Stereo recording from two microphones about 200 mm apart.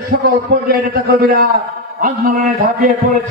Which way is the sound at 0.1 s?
55° right (ahead or behind).